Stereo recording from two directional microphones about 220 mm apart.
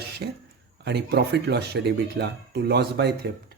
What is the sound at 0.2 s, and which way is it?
Speech, 50° right (ahead or behind).